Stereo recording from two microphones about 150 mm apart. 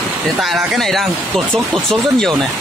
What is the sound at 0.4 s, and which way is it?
Speech, centre (ahead or behind).